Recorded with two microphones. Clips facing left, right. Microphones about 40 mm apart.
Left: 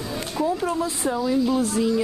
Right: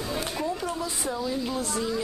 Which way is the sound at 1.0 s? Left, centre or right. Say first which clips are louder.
Left 8 dB; centre.